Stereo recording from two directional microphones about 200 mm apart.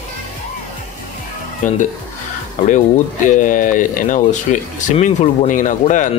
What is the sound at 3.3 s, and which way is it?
Speech, 40° left (ahead or behind).